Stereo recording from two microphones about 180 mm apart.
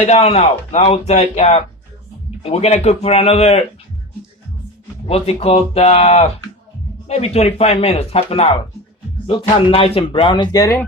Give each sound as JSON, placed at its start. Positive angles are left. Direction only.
{"t": 0.0, "sound": "speech", "side_deg": 35}
{"t": 5.0, "sound": "speech", "side_deg": 35}